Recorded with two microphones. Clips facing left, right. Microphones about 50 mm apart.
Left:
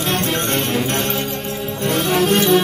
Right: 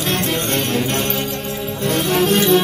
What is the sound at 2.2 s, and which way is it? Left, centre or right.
Music, centre.